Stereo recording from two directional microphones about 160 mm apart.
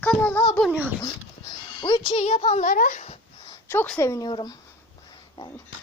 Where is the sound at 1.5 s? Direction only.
30° left (ahead or behind).